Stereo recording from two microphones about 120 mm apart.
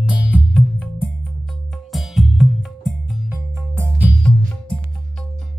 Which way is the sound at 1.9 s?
Centre (ahead or behind).